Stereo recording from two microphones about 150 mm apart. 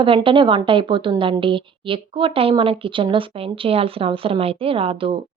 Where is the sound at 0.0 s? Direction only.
35° right (ahead or behind).